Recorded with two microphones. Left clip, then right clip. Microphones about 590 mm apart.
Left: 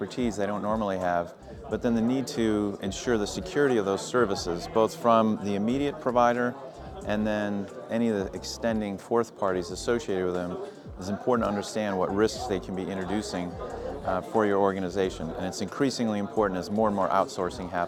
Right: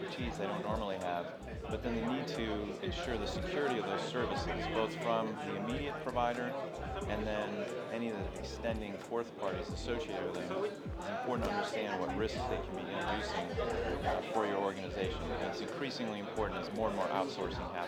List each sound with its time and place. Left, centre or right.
0.3 s speech: left
8.6 s speech: left
11.3 s speech: left
14.3 s speech: left